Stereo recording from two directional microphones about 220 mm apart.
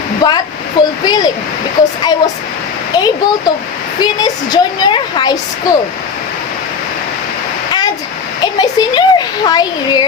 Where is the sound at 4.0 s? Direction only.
20° left (ahead or behind).